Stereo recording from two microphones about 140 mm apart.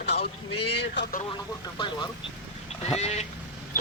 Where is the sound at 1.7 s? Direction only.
35° left (ahead or behind).